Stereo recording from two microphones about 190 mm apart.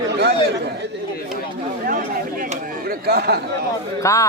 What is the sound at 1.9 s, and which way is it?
Chatter, 45° right (ahead or behind).